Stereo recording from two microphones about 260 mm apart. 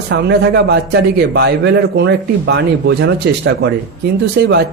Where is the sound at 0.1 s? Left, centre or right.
Right.